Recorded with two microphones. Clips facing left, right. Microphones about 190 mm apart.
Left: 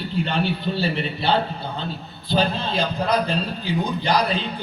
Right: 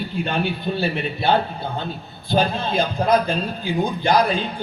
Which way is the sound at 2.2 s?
50° right (ahead or behind).